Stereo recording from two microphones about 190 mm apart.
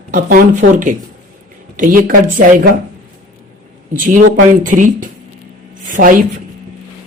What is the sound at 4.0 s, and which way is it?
Speech, 45° right (ahead or behind).